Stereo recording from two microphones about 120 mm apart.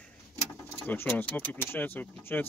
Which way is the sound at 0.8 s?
15° left (ahead or behind).